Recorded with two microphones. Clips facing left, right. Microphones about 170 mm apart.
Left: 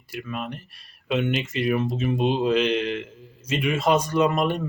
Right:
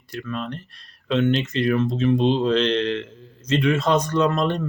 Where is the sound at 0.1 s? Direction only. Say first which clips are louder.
Right 2 dB; 10° left (ahead or behind).